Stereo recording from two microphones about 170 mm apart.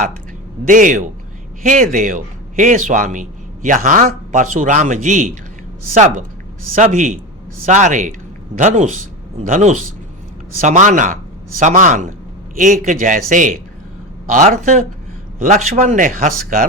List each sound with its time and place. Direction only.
0.7 s a man's voice: 50° right (ahead or behind)